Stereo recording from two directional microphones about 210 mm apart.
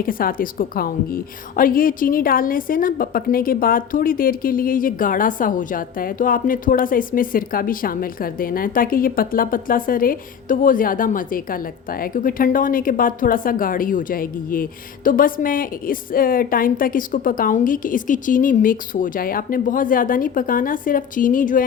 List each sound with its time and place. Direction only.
0.0 s a woman's voice: 45° left (ahead or behind)